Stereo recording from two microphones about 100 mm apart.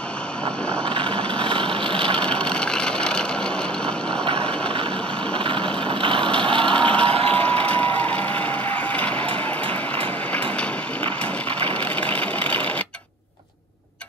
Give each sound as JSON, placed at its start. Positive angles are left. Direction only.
{"t": 0.8, "sound": "vehicle", "side_deg": -60}
{"t": 2.1, "sound": "vehicle", "side_deg": 10}
{"t": 4.2, "sound": "a sound", "side_deg": -65}
{"t": 5.3, "sound": "vehicle", "side_deg": -55}
{"t": 6.7, "sound": "vehicle", "side_deg": 10}
{"t": 11.8, "sound": "a sound", "side_deg": 15}